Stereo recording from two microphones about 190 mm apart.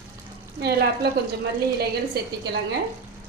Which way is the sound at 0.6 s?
60° right (ahead or behind).